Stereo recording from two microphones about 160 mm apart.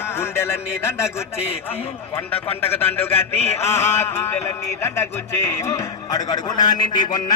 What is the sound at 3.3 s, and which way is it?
Speech, 40° left (ahead or behind).